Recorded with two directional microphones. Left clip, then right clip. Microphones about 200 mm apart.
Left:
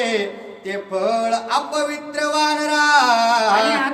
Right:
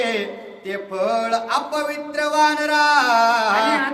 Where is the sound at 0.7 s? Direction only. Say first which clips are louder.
Left 1 dB; 20° right (ahead or behind).